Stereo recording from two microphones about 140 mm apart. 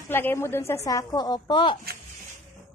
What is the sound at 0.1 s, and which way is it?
Speech, 15° left (ahead or behind).